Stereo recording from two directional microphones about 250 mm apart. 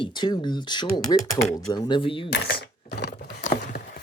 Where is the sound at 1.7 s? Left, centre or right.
Centre.